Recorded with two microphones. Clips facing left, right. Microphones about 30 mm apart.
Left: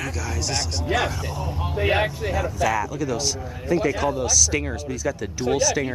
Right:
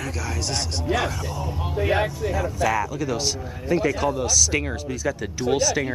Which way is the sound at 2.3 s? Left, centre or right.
Centre.